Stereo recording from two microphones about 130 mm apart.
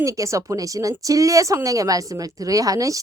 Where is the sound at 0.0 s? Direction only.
25° right (ahead or behind).